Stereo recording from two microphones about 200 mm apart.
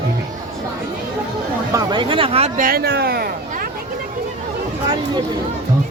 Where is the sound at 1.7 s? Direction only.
20° right (ahead or behind); by 3.6 s 50° right (ahead or behind).